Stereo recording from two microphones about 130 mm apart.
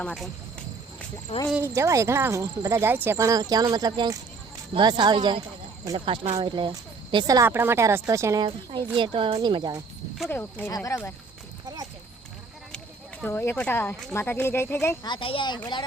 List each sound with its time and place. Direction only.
0.0 s speech: 5° left (ahead or behind)
1.5 s speech: 20° right (ahead or behind)
7.4 s speech: 15° right (ahead or behind)
8.4 s speech: 40° right (ahead or behind)
10.2 s speech: 15° left (ahead or behind)
10.7 s speech: 25° left (ahead or behind)
11.6 s a sound: 30° right (ahead or behind)
13.2 s speech: 20° left (ahead or behind)
15.0 s speech: 40° left (ahead or behind)